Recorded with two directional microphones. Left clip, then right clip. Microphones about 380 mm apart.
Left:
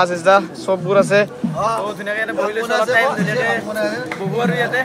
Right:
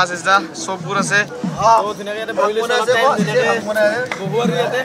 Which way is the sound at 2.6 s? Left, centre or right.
Right.